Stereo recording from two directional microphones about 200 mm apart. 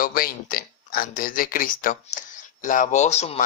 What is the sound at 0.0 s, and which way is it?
Speech, 45° left (ahead or behind).